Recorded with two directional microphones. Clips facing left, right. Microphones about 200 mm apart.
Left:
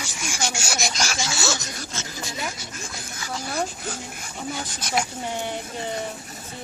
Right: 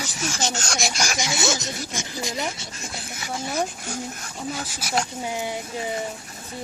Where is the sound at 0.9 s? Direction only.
15° right (ahead or behind).